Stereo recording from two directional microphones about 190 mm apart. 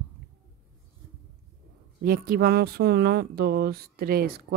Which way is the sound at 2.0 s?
50° right (ahead or behind).